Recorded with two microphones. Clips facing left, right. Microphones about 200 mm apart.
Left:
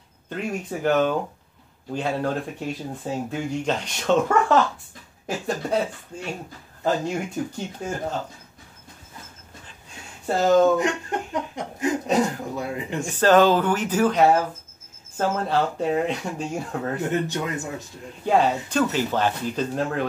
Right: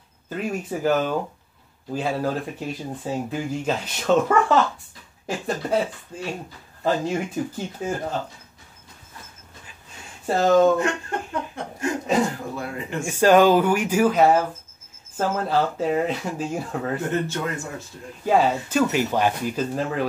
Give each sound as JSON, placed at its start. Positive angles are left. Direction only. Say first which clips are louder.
{"t": 0.3, "sound": "speech", "louder": "right 1 dB", "side_deg": -5}
{"t": 10.2, "sound": "speech", "louder": "right 1 dB", "side_deg": 0}
{"t": 10.8, "sound": "chuckle", "louder": "even", "side_deg": 15}
{"t": 12.5, "sound": "a man's voice", "louder": "left 1 dB", "side_deg": 15}
{"t": 13.0, "sound": "speech", "louder": "right 1 dB", "side_deg": -10}
{"t": 17.1, "sound": "a man's voice", "louder": "even", "side_deg": 15}
{"t": 18.2, "sound": "speech", "louder": "right 1 dB", "side_deg": 0}